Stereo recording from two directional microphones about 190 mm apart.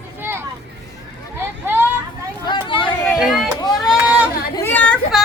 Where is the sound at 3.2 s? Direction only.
Centre (ahead or behind).